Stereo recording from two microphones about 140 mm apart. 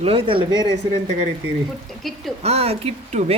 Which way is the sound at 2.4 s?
45° right (ahead or behind).